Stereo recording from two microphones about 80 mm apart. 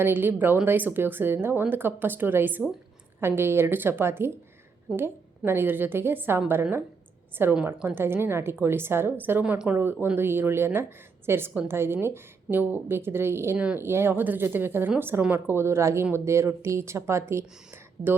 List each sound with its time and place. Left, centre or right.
0.0 s a woman's voice: right
4.9 s a woman's voice: centre
5.5 s a woman's voice: right